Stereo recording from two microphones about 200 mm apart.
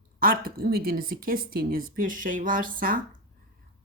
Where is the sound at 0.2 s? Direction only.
45° right (ahead or behind).